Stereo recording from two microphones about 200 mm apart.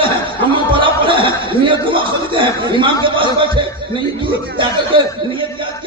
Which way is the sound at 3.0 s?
25° right (ahead or behind).